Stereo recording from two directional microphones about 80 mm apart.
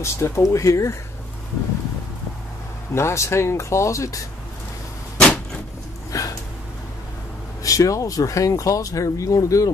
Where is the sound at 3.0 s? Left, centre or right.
Left.